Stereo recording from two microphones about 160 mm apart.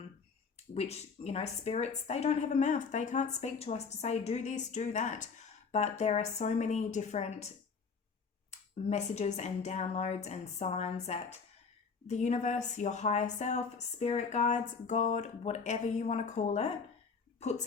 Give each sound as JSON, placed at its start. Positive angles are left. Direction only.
{"t": 0.7, "sound": "a woman's voice", "side_deg": 40}
{"t": 8.4, "sound": "a woman's voice", "side_deg": 45}